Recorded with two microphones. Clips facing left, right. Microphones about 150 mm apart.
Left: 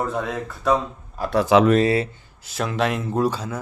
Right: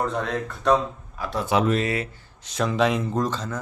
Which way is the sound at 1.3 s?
90° left.